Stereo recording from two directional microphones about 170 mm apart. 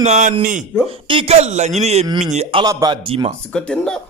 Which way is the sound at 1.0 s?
30° right (ahead or behind).